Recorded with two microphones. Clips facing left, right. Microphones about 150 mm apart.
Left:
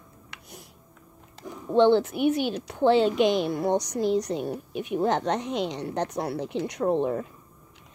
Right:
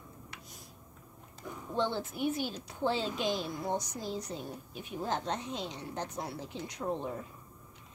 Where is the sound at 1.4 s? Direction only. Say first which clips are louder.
Left 12 dB; 75° left (ahead or behind).